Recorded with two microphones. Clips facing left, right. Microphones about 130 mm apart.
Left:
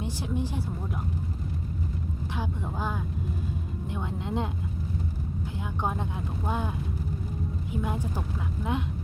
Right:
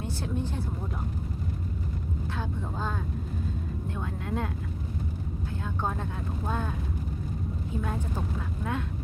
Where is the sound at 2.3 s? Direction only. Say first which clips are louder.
Left 3 dB; 15° left (ahead or behind).